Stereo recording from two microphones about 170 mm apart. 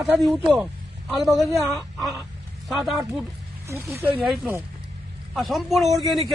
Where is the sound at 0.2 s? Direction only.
Centre (ahead or behind).